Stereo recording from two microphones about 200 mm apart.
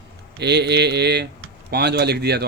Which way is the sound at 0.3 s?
55° right (ahead or behind).